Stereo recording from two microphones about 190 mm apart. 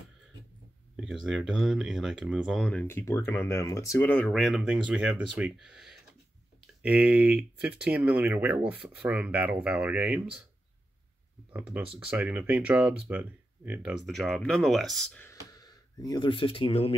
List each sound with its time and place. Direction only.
1.0 s speech: centre (ahead or behind)
11.5 s speech: 10° right (ahead or behind)
15.2 s speech: 20° left (ahead or behind)